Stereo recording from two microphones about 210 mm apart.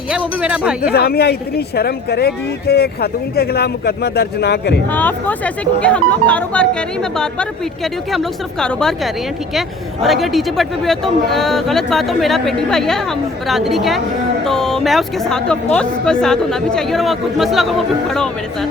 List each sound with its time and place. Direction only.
0.4 s speech: 5° right (ahead or behind)
0.9 s speech: 50° left (ahead or behind)
4.9 s speech: 10° left (ahead or behind)